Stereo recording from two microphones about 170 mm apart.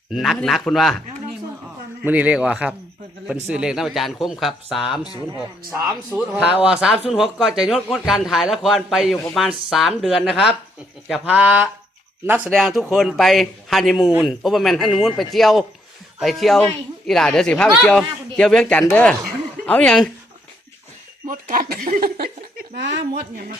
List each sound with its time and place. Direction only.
0.1 s a man's voice: centre (ahead or behind)
2.0 s a man's voice: 10° right (ahead or behind)
6.1 s a man's voice: 10° right (ahead or behind)
21.2 s speech: 55° right (ahead or behind); by 23.0 s 85° right